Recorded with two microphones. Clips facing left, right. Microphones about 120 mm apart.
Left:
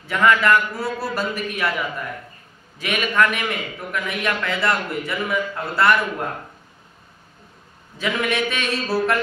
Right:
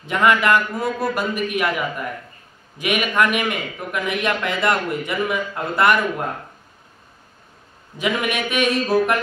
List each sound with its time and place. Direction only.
0.0 s a man's voice: 20° right (ahead or behind)
2.8 s a man's voice: 15° right (ahead or behind)
8.0 s a man's voice: 15° right (ahead or behind)